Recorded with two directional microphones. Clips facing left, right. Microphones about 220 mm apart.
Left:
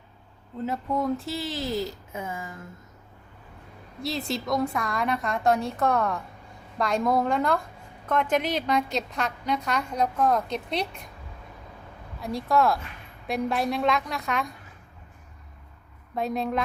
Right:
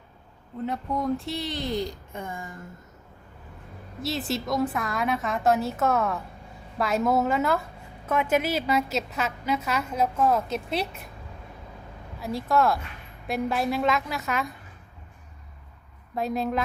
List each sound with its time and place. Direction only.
0.6 s a woman's voice: centre (ahead or behind)
4.0 s a woman's voice: centre (ahead or behind)
12.2 s a woman's voice: centre (ahead or behind)
16.1 s a woman's voice: centre (ahead or behind)